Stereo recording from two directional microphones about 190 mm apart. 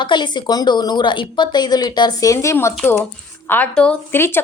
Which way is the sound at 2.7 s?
Centre (ahead or behind).